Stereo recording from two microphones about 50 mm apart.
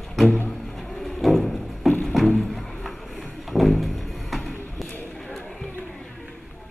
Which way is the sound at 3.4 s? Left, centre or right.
Centre.